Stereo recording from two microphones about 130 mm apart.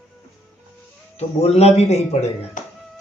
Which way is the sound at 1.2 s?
55° left (ahead or behind).